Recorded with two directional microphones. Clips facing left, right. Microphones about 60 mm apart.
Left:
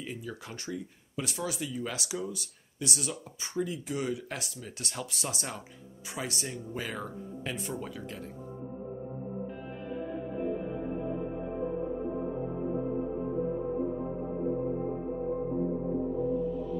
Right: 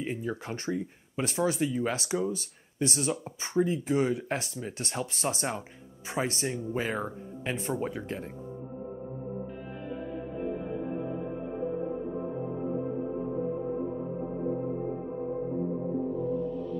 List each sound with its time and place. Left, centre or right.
0.0 s speech: right
16.3 s music: centre